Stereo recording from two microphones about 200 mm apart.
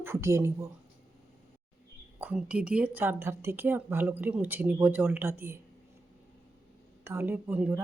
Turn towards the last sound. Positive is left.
turn(degrees=-5)  # may be behind; listen again after turning